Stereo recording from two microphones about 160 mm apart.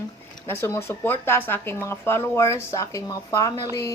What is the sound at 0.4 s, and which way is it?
Speech, 15° left (ahead or behind).